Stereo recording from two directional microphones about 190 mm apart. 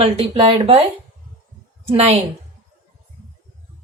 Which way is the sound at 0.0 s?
30° right (ahead or behind).